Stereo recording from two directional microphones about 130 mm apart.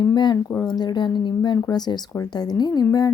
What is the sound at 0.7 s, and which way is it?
Speech, 35° left (ahead or behind).